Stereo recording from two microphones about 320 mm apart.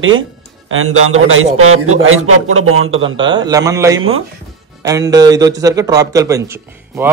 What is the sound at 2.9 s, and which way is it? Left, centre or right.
A man's voice, centre.